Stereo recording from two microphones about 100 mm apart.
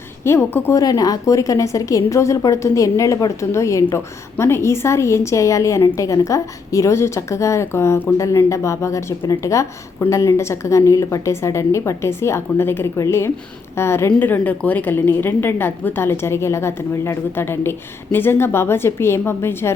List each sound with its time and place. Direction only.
0.3 s a woman's voice: 25° left (ahead or behind)
0.8 s a woman's voice: 40° left (ahead or behind)